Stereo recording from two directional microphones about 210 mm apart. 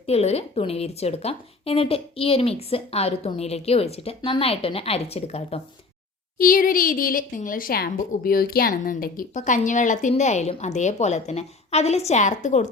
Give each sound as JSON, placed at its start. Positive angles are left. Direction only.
{"t": 0.0, "sound": "a woman's voice", "side_deg": 30}
{"t": 6.4, "sound": "a woman's voice", "side_deg": 40}